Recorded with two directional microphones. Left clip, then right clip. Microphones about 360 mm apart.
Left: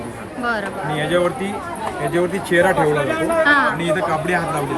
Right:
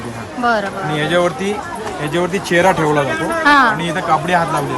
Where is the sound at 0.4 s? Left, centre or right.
Centre.